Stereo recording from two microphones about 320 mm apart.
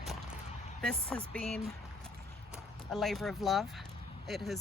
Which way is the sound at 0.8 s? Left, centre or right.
Centre.